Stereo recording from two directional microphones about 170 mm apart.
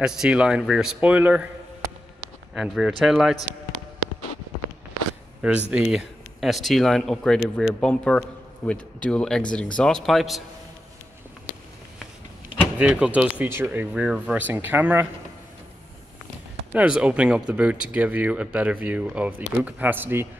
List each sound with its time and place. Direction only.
0.0 s a man's voice: 5° right (ahead or behind)
2.5 s a man's voice: 5° right (ahead or behind)
5.7 s a man's voice: 5° right (ahead or behind)
12.7 s speech: 10° right (ahead or behind)
16.7 s speech: 5° right (ahead or behind)